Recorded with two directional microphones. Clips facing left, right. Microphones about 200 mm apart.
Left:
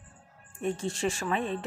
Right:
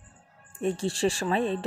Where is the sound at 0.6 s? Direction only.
35° right (ahead or behind).